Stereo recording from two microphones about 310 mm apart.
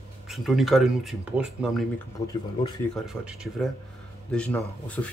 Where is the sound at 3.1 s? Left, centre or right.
Centre.